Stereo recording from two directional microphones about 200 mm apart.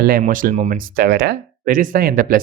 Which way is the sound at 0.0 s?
45° right (ahead or behind).